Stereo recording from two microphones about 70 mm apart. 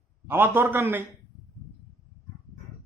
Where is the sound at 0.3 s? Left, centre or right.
Right.